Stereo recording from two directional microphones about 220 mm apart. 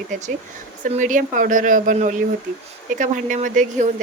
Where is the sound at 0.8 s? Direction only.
35° right (ahead or behind).